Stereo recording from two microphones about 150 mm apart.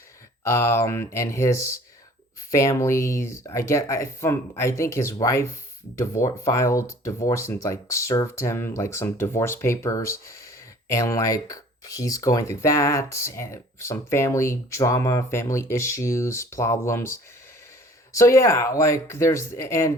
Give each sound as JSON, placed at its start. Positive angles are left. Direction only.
{"t": 0.4, "sound": "speech", "side_deg": 20}